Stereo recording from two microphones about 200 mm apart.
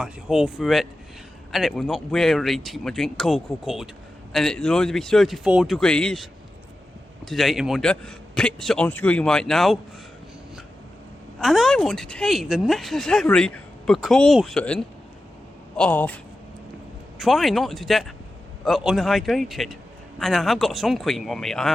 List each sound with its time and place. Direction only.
0.0 s speech: centre (ahead or behind)
7.3 s speech: centre (ahead or behind)
11.3 s speech: centre (ahead or behind)